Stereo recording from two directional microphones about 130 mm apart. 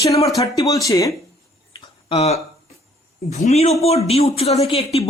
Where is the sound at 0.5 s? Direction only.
25° left (ahead or behind).